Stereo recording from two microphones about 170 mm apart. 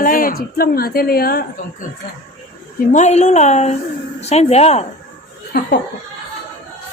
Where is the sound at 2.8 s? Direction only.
45° left (ahead or behind).